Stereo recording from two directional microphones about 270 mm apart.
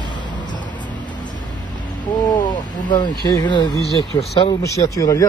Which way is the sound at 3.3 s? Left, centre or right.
Centre.